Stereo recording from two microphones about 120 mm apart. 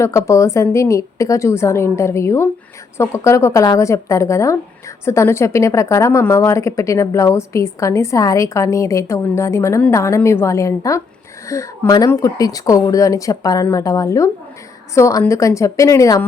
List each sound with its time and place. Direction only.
0.0 s speech: 25° left (ahead or behind)